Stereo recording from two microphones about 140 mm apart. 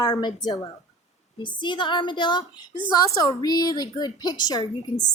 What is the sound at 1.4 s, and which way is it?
A woman's voice, 35° left (ahead or behind).